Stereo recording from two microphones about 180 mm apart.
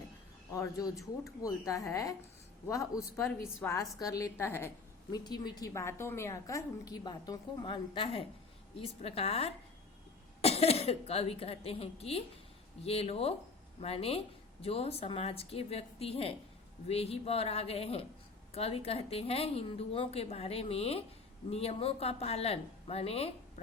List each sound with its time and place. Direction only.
0.5 s a woman's voice: 20° left (ahead or behind); by 23.3 s 35° left (ahead or behind)